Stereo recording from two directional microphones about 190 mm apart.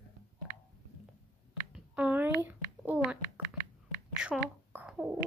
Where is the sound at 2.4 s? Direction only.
10° right (ahead or behind).